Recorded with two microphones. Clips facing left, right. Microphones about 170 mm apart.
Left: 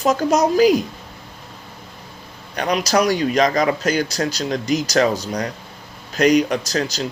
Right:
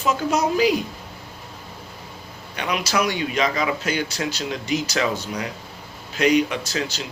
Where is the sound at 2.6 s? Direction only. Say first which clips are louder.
Left 5 dB; 40° left (ahead or behind).